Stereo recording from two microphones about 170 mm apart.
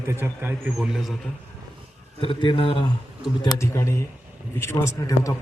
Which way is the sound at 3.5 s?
15° left (ahead or behind).